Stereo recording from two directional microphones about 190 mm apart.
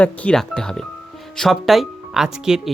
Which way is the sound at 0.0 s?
5° left (ahead or behind).